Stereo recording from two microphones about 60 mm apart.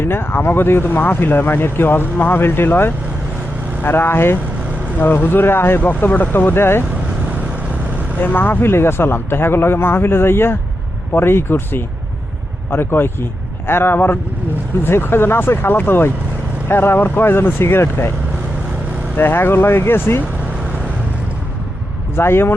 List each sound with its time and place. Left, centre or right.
0.0 s speech: left
4.9 s speech: left
7.3 s vehicle: right
8.2 s speech: left
19.1 s speech: left
22.1 s speech: left